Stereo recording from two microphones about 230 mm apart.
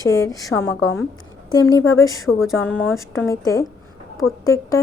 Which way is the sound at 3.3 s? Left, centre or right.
Centre.